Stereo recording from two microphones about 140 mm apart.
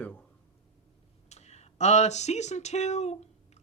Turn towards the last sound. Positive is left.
turn(degrees=55)  # may be behind; listen again after turning